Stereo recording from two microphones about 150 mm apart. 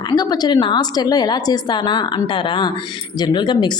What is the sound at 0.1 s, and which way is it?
A woman's voice, 25° left (ahead or behind).